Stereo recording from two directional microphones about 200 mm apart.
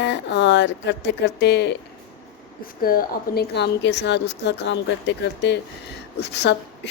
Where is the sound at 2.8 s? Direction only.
45° left (ahead or behind).